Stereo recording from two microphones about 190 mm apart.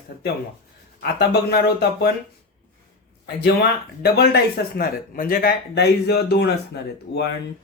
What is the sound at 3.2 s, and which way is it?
Speech, 60° left (ahead or behind).